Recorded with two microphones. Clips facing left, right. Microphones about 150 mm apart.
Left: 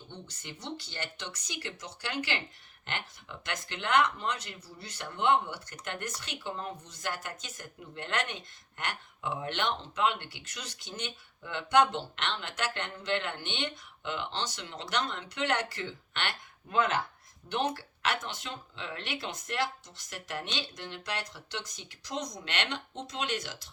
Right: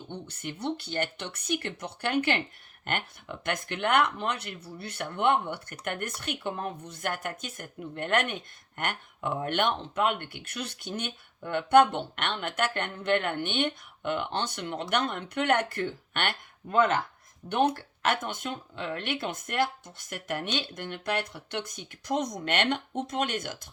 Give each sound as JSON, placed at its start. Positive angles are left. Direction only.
{"t": 0.1, "sound": "speech", "side_deg": -55}